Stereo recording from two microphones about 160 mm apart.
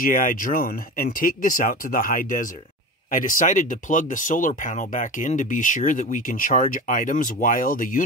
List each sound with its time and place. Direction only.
0.0 s speech: 60° left (ahead or behind)